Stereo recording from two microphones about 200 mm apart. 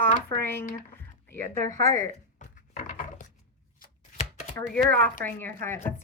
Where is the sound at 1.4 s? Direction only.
40° right (ahead or behind).